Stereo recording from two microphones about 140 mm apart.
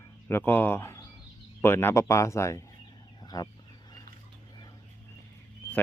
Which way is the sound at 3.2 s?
30° left (ahead or behind).